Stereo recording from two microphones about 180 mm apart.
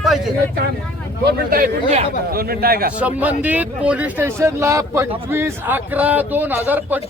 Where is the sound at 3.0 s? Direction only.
10° right (ahead or behind).